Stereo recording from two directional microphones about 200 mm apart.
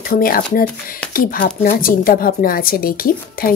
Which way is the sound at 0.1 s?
45° left (ahead or behind).